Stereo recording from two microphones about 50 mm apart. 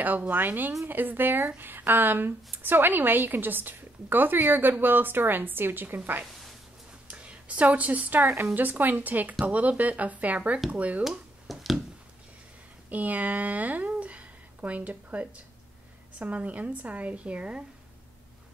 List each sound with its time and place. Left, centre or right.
0.0 s a woman's voice: right
7.1 s a woman's voice: right
11.1 s a sound: centre
12.9 s a woman's voice: right